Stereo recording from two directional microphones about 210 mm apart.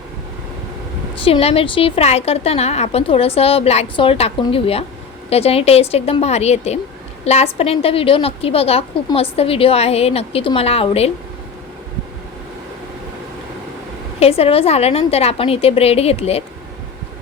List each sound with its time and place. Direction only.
1.2 s a woman's voice: 30° left (ahead or behind)
14.2 s a woman's voice: 30° left (ahead or behind)